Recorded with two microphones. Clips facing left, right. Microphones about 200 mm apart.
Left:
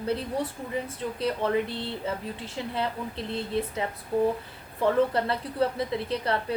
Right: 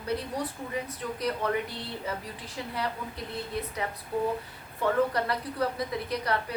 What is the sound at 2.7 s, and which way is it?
A woman's voice, 25° left (ahead or behind).